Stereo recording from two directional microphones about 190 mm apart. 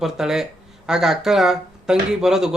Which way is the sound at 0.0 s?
Centre (ahead or behind).